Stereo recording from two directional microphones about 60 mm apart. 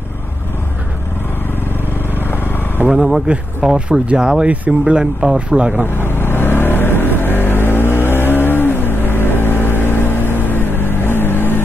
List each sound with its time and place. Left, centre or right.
2.1 s vehicle: left
2.9 s speech: centre
5.9 s vehicle: left